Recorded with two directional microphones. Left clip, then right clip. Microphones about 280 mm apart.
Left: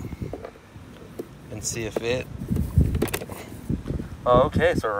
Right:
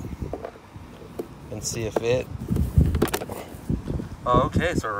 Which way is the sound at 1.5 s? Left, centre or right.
Centre.